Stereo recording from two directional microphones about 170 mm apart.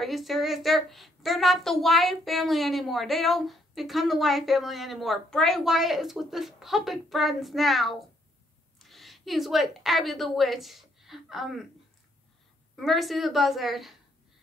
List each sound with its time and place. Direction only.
0.0 s a woman's voice: centre (ahead or behind)
12.7 s a woman's voice: centre (ahead or behind)